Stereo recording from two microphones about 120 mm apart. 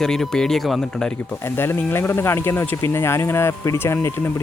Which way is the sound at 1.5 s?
20° left (ahead or behind).